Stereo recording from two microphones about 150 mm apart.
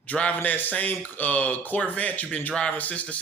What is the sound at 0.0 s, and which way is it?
Speech, 10° left (ahead or behind).